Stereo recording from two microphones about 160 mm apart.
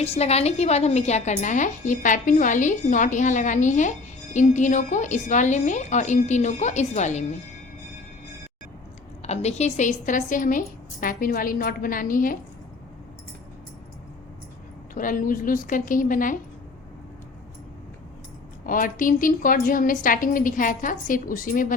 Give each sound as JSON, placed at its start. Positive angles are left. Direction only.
{"t": 0.0, "sound": "a woman's voice", "side_deg": 40}
{"t": 9.2, "sound": "a woman's voice", "side_deg": 45}
{"t": 14.9, "sound": "a woman's voice", "side_deg": 55}
{"t": 18.6, "sound": "a woman's voice", "side_deg": 60}